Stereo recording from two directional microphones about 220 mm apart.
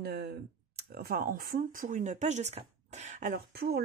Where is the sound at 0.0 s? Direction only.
45° right (ahead or behind).